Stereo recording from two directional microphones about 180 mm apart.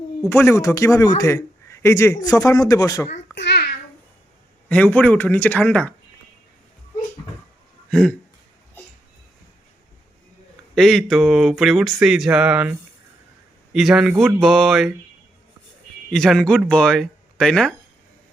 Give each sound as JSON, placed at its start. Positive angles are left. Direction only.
{"t": 0.3, "sound": "a man's voice", "side_deg": 15}
{"t": 3.3, "sound": "babbling", "side_deg": 70}
{"t": 4.7, "sound": "a man's voice", "side_deg": 10}
{"t": 7.9, "sound": "speech", "side_deg": 5}
{"t": 10.8, "sound": "speech", "side_deg": 0}
{"t": 13.7, "sound": "speech", "side_deg": 0}
{"t": 16.0, "sound": "speech", "side_deg": 0}